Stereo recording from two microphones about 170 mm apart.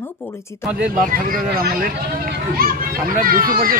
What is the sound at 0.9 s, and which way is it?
A child's voice, 55° right (ahead or behind).